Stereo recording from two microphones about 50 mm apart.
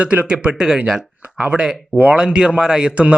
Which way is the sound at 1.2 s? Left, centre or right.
Right.